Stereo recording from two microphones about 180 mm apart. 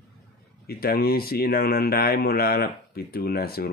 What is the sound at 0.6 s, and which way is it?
Speech, 60° left (ahead or behind).